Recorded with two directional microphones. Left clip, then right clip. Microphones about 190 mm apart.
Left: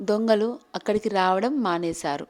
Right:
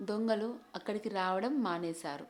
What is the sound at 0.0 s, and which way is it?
A woman's voice, 40° left (ahead or behind).